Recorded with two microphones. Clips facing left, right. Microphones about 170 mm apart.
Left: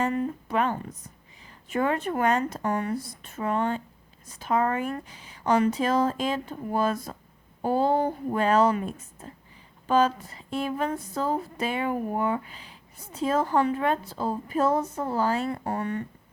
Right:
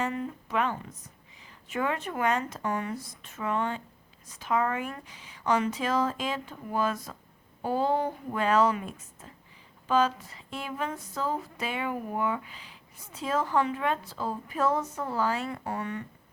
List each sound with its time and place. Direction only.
0.0 s a woman's voice: 45° left (ahead or behind)
9.8 s speech: 50° left (ahead or behind)
10.2 s a woman's voice: 35° left (ahead or behind)